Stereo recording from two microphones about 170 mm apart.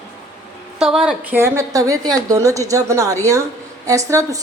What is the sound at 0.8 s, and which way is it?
A woman's voice, 5° right (ahead or behind).